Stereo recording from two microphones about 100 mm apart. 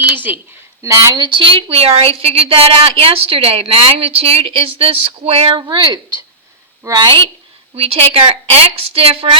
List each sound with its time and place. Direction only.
0.8 s speech: 30° right (ahead or behind)
1.1 s a woman's voice: 50° right (ahead or behind); by 5.5 s 85° right
5.5 s speech: 45° right (ahead or behind)
7.8 s a woman's voice: 80° right